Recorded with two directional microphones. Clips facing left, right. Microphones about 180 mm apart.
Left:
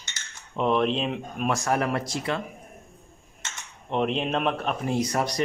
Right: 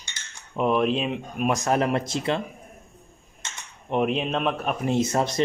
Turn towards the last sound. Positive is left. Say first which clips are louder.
# right 3 dB
turn(degrees=-25)  # may be behind; listen again after turning